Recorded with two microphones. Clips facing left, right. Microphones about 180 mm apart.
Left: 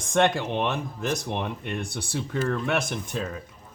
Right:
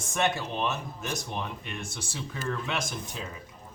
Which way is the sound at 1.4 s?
60° left (ahead or behind).